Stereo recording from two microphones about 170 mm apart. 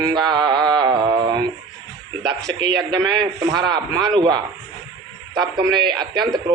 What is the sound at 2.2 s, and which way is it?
Speech, 90° right.